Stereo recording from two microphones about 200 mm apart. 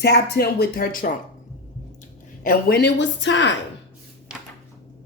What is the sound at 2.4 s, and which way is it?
Speech, 45° left (ahead or behind).